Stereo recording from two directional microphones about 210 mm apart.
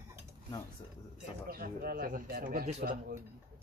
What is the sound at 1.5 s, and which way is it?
Speech, 45° right (ahead or behind).